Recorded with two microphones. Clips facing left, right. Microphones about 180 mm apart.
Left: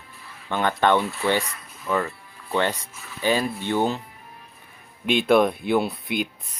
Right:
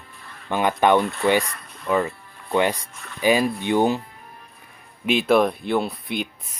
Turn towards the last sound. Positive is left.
turn(degrees=0)  # may be behind; listen again after turning